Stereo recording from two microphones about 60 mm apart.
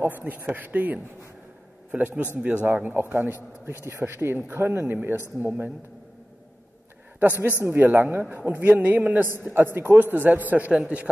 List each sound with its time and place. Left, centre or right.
0.0 s a man's voice: right
7.2 s a man's voice: right